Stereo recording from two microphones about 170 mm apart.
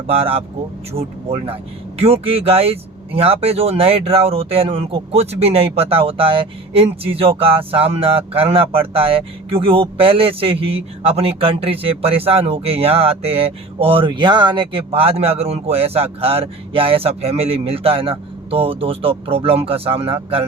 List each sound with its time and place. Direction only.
0.1 s speech: 35° right (ahead or behind)